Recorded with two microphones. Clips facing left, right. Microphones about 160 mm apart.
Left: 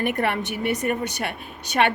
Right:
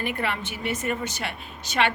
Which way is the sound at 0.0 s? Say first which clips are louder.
Left 5 dB; 60° left (ahead or behind).